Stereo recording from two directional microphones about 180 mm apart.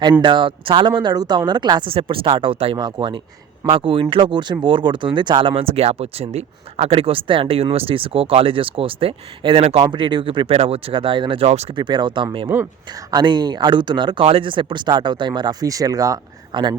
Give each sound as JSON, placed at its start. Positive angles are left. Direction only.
{"t": 0.0, "sound": "speech", "side_deg": -25}
{"t": 11.8, "sound": "speech", "side_deg": -25}